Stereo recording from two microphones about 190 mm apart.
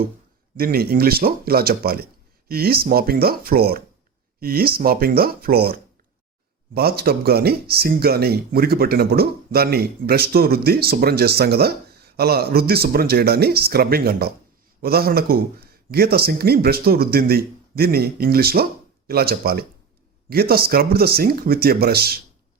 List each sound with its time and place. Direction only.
0.5 s speech: 50° right (ahead or behind)